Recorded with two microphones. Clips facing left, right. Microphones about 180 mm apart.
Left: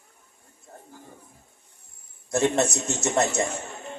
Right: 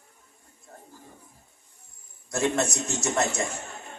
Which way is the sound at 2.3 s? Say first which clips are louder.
Left 3 dB; 25° left (ahead or behind).